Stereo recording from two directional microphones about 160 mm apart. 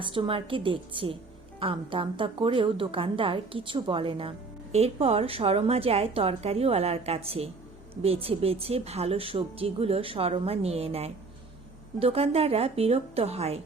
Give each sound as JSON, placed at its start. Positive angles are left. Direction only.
{"t": 0.0, "sound": "a woman's voice", "side_deg": -35}